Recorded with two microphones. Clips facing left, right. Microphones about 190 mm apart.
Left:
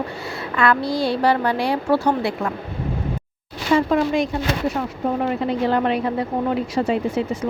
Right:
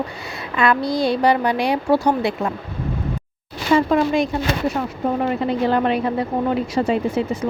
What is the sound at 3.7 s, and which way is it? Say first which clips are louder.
Speech: right 1 dB; 30° right (ahead or behind).